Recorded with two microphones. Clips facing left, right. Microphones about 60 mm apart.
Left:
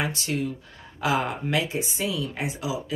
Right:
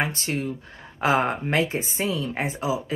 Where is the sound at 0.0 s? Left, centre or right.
Right.